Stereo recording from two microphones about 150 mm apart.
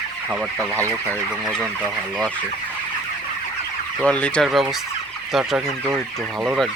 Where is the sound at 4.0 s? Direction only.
5° left (ahead or behind).